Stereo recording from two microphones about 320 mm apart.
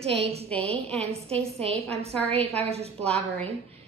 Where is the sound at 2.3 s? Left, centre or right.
Centre.